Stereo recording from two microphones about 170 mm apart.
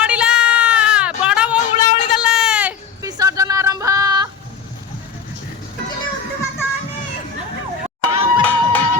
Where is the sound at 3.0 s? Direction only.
20° right (ahead or behind).